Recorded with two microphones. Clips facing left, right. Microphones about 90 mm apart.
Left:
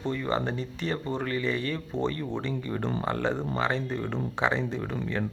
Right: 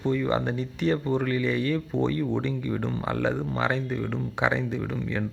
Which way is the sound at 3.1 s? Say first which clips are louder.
Right 3 dB; 10° right (ahead or behind).